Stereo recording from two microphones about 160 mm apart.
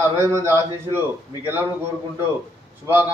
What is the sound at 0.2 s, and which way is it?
Speech, 15° right (ahead or behind).